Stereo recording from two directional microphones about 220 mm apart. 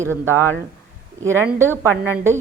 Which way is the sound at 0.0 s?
10° right (ahead or behind).